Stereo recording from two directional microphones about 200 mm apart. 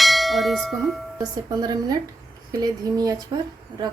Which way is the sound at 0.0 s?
Centre (ahead or behind).